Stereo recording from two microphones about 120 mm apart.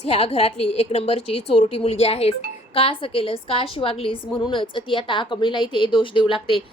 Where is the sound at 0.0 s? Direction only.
60° left (ahead or behind).